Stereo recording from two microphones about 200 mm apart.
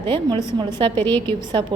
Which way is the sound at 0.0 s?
25° right (ahead or behind).